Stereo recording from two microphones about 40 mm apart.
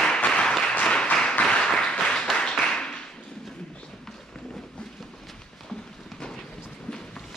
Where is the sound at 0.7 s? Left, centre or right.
Left.